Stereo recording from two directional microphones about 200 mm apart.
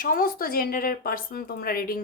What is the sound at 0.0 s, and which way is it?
Speech, 45° left (ahead or behind).